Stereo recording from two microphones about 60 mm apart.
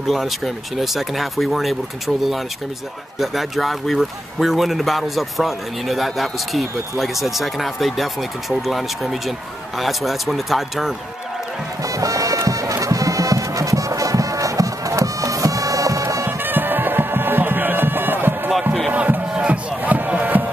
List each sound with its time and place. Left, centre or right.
0.0 s speech: centre
3.2 s speech: centre
11.8 s bagpipes: right
16.3 s music: right